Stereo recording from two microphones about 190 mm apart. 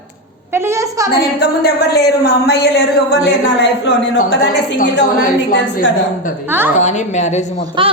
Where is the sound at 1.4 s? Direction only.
55° left (ahead or behind).